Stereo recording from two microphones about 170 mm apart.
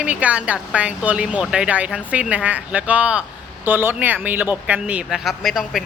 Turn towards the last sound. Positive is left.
turn(degrees=0)  # may be behind; listen again after turning